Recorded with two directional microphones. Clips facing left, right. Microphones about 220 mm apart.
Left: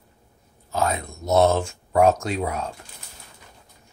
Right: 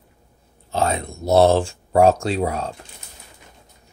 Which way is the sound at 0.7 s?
30° right (ahead or behind).